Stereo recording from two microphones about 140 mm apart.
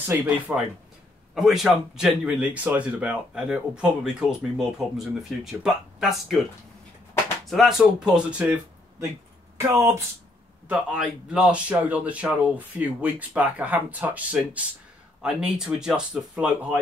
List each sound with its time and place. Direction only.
0.0 s speech: 20° right (ahead or behind)
1.3 s speech: centre (ahead or behind)
7.4 s speech: centre (ahead or behind)
9.8 s speech: 20° right (ahead or behind)
10.7 s speech: 10° right (ahead or behind)